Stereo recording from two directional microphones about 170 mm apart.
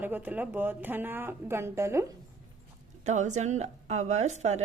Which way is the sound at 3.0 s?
45° right (ahead or behind).